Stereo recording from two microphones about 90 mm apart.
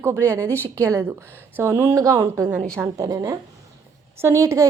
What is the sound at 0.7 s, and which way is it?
A woman's voice, 35° right (ahead or behind).